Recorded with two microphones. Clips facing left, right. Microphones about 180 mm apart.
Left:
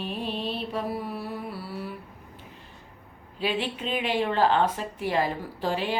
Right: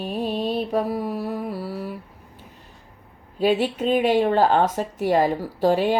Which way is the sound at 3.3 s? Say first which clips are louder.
Right 8 dB; 45° right (ahead or behind).